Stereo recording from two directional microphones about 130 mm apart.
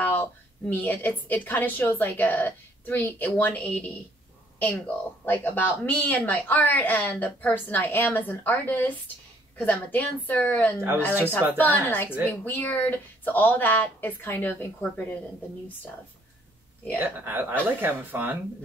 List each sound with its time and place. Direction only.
0.0 s a sound: 15° left (ahead or behind)
0.7 s speech: 15° left (ahead or behind)
17.0 s speech: 15° right (ahead or behind)